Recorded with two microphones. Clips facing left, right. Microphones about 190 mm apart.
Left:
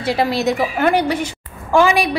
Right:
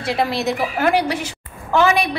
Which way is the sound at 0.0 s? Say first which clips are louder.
Left 3 dB; centre (ahead or behind).